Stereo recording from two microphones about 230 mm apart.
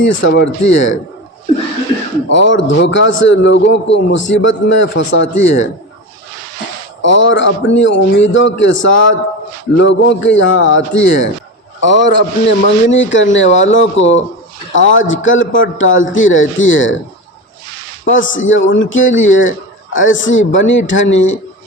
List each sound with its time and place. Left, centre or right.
0.0 s a man's voice: left
2.3 s a man's voice: left
7.0 s a man's voice: left
18.0 s a man's voice: left